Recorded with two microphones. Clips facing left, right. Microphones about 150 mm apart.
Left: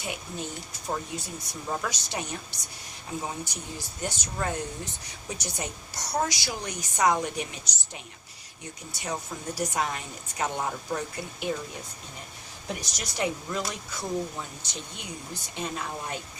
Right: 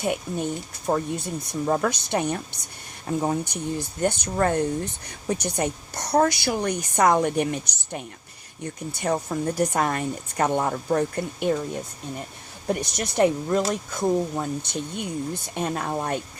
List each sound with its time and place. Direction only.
0.0 s speech: 55° right (ahead or behind)
12.6 s speech: 55° right (ahead or behind)